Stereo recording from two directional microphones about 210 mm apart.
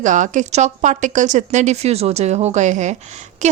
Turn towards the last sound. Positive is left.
turn(degrees=-35)  # may be behind; listen again after turning